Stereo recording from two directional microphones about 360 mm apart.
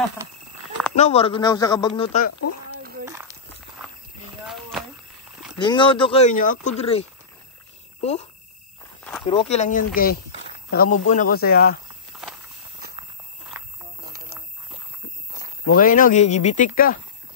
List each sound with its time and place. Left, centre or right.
0.9 s speech: centre
2.8 s a sound: right
3.1 s walk: centre
4.5 s a sound: centre
5.6 s speech: centre
12.1 s horse: centre
15.7 s speech: left